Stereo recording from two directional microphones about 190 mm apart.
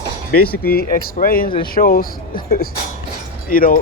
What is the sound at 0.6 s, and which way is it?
Speech, 50° left (ahead or behind).